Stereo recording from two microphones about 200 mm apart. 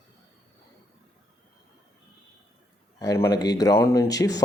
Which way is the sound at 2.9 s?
20° left (ahead or behind).